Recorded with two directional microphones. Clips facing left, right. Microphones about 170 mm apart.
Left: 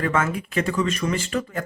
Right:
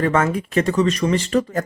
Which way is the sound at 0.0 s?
40° right (ahead or behind).